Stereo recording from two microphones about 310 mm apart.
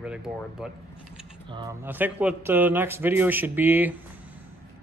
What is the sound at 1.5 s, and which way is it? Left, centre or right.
A man's voice, centre.